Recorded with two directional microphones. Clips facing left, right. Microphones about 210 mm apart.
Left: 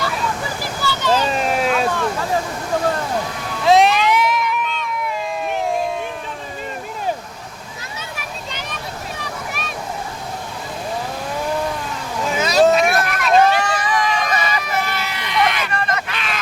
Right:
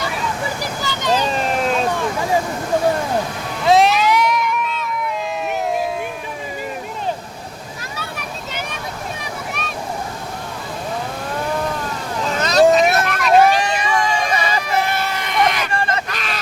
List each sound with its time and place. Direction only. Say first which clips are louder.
0.6 s a sound: left 1 dB; 15° right (ahead or behind)
1.2 s vehicle: even; 5° left (ahead or behind)
3.6 s music: even; centre (ahead or behind)
9.5 s a sound: right 1 dB; centre (ahead or behind)
12.2 s vehicle: even; 10° left (ahead or behind)
12.8 s vehicle: right 2 dB; 25° right (ahead or behind)
13.1 s vehicle: right 2 dB; centre (ahead or behind)
13.3 s vehicle: right 1 dB; 10° right (ahead or behind); by 14.8 s 30° right (ahead or behind)
14.8 s vehicle: right 4 dB; 50° right (ahead or behind)
15.7 s hubbub: right 1 dB; 30° right (ahead or behind)
16.0 s a sound: even; 40° right (ahead or behind)